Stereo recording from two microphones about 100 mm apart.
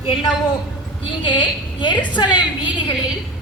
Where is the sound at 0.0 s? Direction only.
60° left (ahead or behind).